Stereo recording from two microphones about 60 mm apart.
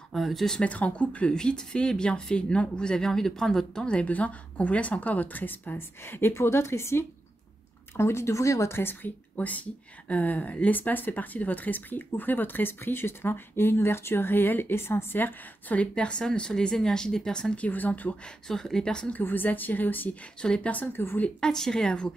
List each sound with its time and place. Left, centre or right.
0.1 s speech: centre
0.6 s speech: left
8.7 s speech: left
9.4 s speech: left
15.7 s a woman's voice: centre
17.6 s speech: left
18.5 s a woman's voice: centre
19.1 s speech: left
20.4 s a woman's voice: centre
20.7 s speech: left
21.4 s a woman's voice: centre